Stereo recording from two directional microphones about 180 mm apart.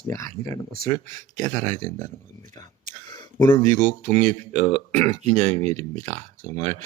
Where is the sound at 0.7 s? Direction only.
50° right (ahead or behind).